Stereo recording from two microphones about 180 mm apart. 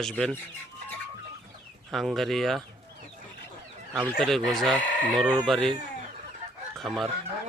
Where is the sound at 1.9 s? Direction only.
Centre (ahead or behind).